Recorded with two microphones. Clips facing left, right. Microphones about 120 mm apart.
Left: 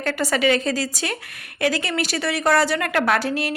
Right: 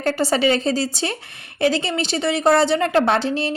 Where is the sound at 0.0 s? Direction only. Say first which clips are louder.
Right 2 dB; 30° right (ahead or behind).